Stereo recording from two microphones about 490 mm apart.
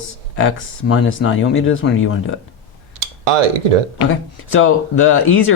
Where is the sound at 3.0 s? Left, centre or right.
Right.